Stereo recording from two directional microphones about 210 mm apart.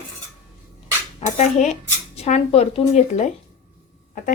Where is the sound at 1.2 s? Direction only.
35° left (ahead or behind).